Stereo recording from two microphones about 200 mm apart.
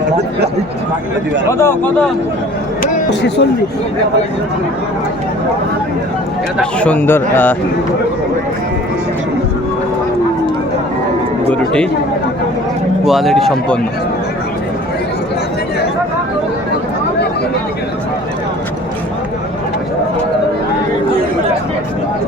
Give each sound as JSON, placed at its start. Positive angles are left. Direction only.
{"t": 1.5, "sound": "a man's voice", "side_deg": 10}
{"t": 3.1, "sound": "speech", "side_deg": 60}
{"t": 6.6, "sound": "a man's voice", "side_deg": 5}
{"t": 11.5, "sound": "speech", "side_deg": 5}
{"t": 13.1, "sound": "speech", "side_deg": 0}